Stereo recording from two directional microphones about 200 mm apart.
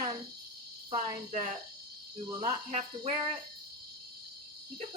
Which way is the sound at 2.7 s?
35° right (ahead or behind).